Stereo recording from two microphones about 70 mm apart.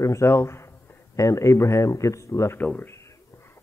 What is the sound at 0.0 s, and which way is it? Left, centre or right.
Speech, left.